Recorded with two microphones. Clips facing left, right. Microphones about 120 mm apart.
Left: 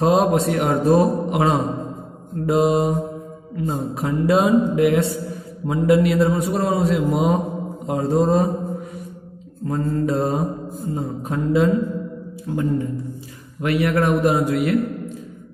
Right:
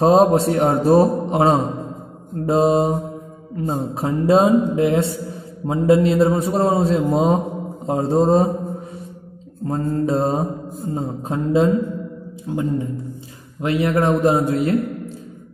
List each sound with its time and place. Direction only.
0.0 s a man's voice: 30° right (ahead or behind)
9.7 s a man's voice: 25° right (ahead or behind)